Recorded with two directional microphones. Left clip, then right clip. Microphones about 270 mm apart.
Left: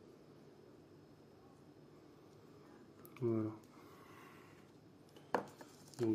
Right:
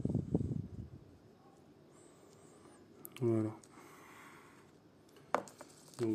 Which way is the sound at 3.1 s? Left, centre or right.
Right.